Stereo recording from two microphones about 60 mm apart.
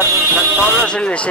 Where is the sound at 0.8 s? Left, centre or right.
Centre.